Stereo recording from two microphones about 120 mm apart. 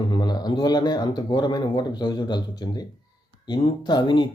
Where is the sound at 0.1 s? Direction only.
35° left (ahead or behind).